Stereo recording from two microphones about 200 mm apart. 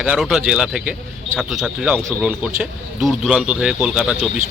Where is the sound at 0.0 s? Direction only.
5° right (ahead or behind).